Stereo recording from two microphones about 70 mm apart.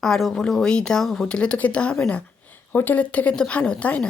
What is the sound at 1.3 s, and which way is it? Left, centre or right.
Speech, centre.